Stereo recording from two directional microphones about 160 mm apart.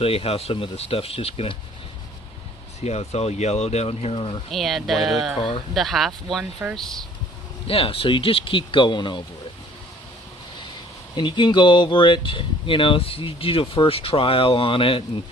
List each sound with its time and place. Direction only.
0.0 s speech: 35° left (ahead or behind)
2.8 s speech: 40° left (ahead or behind)
4.5 s speech: centre (ahead or behind)
7.6 s speech: 35° left (ahead or behind)
11.1 s speech: 30° left (ahead or behind)